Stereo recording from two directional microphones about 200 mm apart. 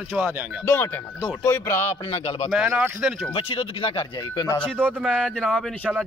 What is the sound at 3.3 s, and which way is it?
Speech, 25° left (ahead or behind).